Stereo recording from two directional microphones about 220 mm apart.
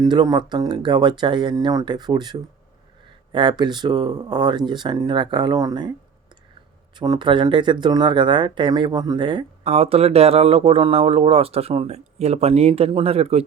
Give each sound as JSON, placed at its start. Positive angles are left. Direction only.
{"t": 0.0, "sound": "speech", "side_deg": -20}
{"t": 6.9, "sound": "speech", "side_deg": -20}